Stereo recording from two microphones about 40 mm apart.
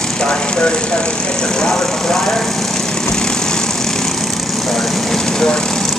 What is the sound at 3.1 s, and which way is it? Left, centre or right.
Vehicle, centre.